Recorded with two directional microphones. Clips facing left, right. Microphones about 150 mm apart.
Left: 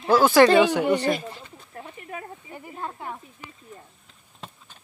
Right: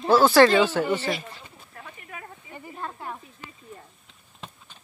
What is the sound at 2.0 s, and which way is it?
Snake, 35° left (ahead or behind).